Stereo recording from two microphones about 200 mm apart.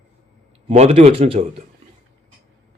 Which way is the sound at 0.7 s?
30° right (ahead or behind).